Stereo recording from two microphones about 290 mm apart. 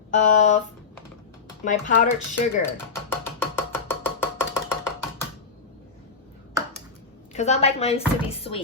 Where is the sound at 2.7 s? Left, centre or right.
Centre.